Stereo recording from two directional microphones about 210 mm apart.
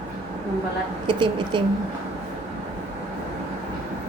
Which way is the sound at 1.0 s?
20° right (ahead or behind).